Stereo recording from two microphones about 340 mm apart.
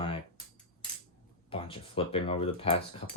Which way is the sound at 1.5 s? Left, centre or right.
Centre.